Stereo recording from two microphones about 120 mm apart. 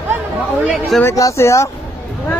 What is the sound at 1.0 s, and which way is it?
Speech, 25° left (ahead or behind).